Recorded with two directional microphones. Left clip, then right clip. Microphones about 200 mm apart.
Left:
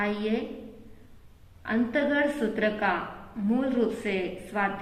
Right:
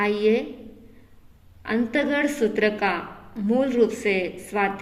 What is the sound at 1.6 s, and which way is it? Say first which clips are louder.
A woman's voice: right 3 dB; 45° right (ahead or behind).